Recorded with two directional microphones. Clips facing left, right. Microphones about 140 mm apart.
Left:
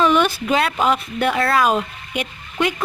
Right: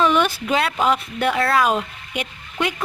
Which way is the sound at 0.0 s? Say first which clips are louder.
Left 2 dB; 20° left (ahead or behind).